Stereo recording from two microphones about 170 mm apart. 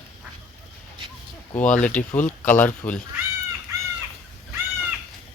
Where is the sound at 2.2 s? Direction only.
50° left (ahead or behind).